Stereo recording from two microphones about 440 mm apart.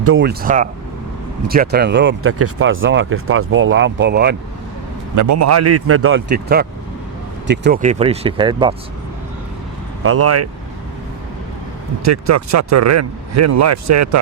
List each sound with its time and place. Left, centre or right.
0.0 s speech: right
5.1 s speech: right; by 8.7 s centre
10.0 s speech: right
12.0 s speech: right